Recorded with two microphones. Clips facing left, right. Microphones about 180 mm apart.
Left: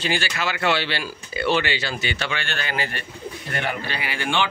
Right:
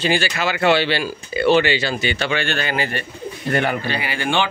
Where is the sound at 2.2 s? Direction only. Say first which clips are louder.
Right 7 dB; 55° right (ahead or behind).